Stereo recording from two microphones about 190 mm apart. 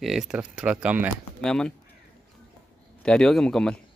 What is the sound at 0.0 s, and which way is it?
Speech, centre (ahead or behind).